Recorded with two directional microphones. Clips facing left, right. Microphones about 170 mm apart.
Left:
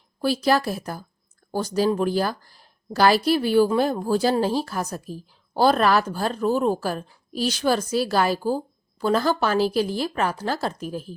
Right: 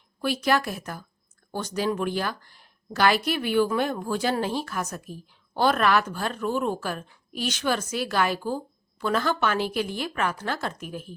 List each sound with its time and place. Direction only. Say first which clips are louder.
0.2 s a woman's voice: left 3 dB; 35° left (ahead or behind)